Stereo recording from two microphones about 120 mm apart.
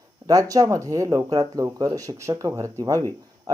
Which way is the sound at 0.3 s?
30° right (ahead or behind).